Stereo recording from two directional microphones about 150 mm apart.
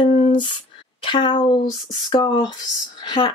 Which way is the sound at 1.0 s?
30° left (ahead or behind).